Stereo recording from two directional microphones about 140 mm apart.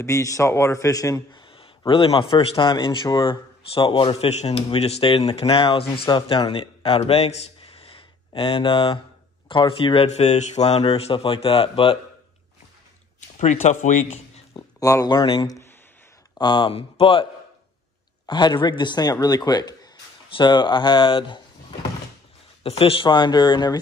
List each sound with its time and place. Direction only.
0.0 s a man's voice: 20° left (ahead or behind)
1.9 s a man's voice: 40° left (ahead or behind)
13.4 s a man's voice: 55° left (ahead or behind)
14.5 s a sound: 25° left (ahead or behind)
15.1 s speech: 40° left (ahead or behind)
22.6 s speech: 45° left (ahead or behind)